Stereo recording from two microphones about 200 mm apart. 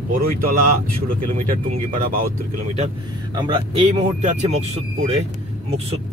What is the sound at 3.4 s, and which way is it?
Speech, 25° right (ahead or behind).